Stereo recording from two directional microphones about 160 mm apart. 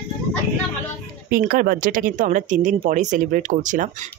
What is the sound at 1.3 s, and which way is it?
Speech, 65° right (ahead or behind).